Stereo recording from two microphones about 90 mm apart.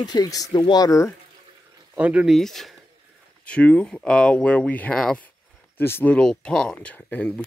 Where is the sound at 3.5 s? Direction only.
15° left (ahead or behind).